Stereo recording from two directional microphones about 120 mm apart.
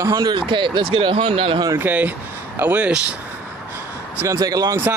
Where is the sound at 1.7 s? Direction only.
15° right (ahead or behind).